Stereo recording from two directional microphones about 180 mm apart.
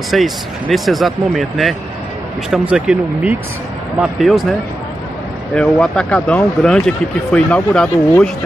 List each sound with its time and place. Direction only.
0.1 s speech: centre (ahead or behind)